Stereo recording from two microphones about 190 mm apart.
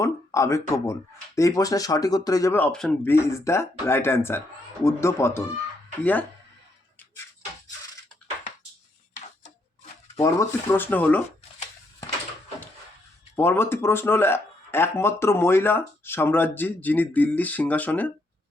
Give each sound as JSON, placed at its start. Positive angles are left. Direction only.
{"t": 0.0, "sound": "speech", "side_deg": 15}
{"t": 10.2, "sound": "speech", "side_deg": 15}
{"t": 13.3, "sound": "speech", "side_deg": 10}